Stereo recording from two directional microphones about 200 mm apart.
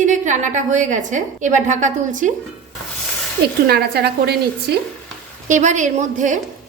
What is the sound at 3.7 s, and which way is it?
Speech, 50° right (ahead or behind).